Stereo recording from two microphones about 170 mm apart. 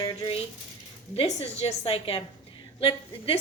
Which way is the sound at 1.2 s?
40° left (ahead or behind).